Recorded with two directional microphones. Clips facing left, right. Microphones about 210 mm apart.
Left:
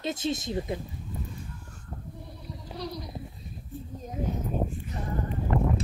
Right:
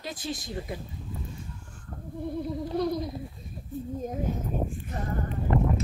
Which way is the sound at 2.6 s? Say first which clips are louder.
Right 8 dB; 50° right (ahead or behind).